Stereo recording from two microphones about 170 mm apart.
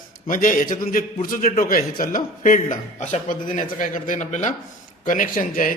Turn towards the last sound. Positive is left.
turn(degrees=55)  # may be behind; listen again after turning